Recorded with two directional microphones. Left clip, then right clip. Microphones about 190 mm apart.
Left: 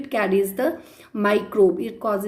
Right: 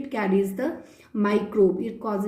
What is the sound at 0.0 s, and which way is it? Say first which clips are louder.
A woman's voice: left 4 dB; 20° left (ahead or behind).